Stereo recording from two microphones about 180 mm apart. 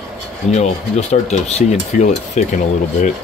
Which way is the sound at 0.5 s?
40° left (ahead or behind).